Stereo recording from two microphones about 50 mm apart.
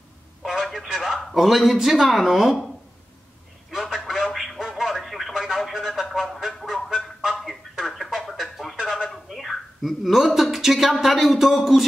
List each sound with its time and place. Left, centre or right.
0.4 s telephone: centre
0.9 s speech: centre
3.7 s telephone: centre
4.1 s a sound: centre
8.3 s a sound: centre
11.5 s speech: centre